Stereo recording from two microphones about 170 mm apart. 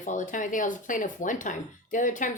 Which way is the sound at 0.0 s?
50° left (ahead or behind).